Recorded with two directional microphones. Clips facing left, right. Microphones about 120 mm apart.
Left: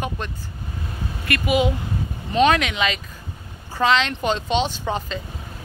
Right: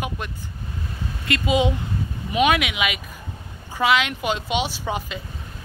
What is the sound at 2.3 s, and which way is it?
Speech, 10° right (ahead or behind).